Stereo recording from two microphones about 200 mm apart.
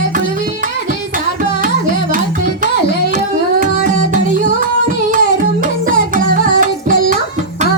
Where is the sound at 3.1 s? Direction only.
40° right (ahead or behind).